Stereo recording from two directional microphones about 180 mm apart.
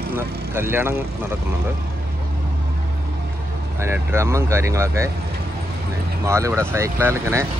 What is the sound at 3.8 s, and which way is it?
Speech, 15° right (ahead or behind).